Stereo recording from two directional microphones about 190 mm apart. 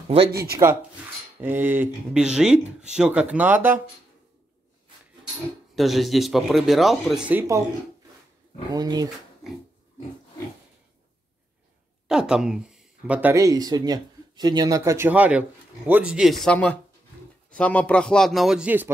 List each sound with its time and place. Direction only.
1.4 s speech: 10° right (ahead or behind)
5.8 s speech: centre (ahead or behind)
8.7 s speech: 20° right (ahead or behind)
12.1 s speech: 5° right (ahead or behind)